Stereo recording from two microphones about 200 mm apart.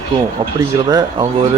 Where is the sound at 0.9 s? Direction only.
20° right (ahead or behind).